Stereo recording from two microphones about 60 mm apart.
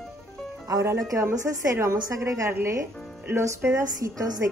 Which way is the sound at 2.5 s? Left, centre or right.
Right.